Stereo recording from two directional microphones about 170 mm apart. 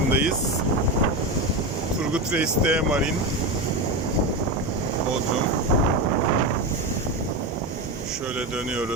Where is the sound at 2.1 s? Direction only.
5° right (ahead or behind).